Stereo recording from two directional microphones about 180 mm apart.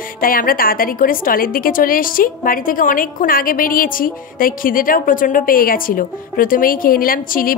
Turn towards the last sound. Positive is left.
turn(degrees=50)  # may be behind; listen again after turning